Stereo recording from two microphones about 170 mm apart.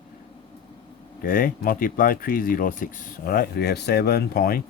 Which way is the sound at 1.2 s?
60° left (ahead or behind).